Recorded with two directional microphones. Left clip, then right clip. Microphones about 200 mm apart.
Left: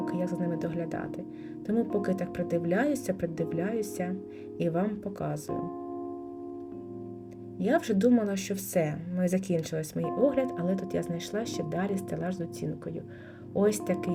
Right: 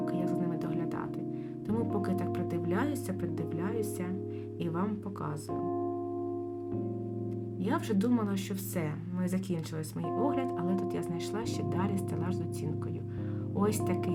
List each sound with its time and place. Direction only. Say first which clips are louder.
0.0 s music: left 1 dB; 10° left (ahead or behind)
1.6 s speech: left 5 dB; 10° left (ahead or behind)
5.5 s speech: right 1 dB; centre (ahead or behind)
7.6 s speech: left 7 dB; 10° left (ahead or behind)
13.6 s speech: left 5 dB; 10° left (ahead or behind)